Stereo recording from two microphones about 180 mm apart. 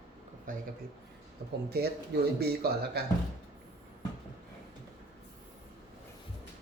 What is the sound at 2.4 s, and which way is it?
Speech, 60° right (ahead or behind).